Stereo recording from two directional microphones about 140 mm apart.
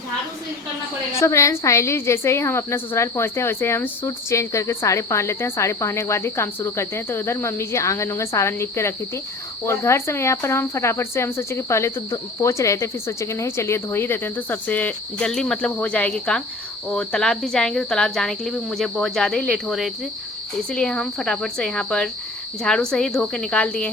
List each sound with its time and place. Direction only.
1.2 s speech: 20° left (ahead or behind)
16.9 s cricket: 5° left (ahead or behind)